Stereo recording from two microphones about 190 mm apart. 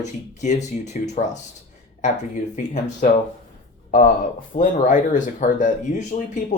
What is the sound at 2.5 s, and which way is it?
Speech, 40° left (ahead or behind).